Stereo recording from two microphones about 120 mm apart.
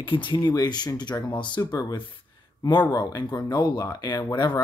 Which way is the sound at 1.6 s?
30° left (ahead or behind).